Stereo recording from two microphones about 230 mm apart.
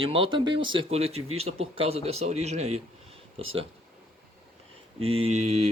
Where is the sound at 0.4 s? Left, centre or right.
Right.